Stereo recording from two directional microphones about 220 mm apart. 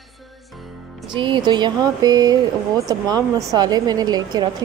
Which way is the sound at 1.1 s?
20° right (ahead or behind).